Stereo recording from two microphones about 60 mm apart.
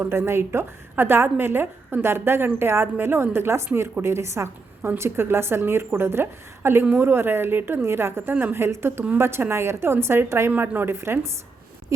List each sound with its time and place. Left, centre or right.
0.0 s a woman's voice: right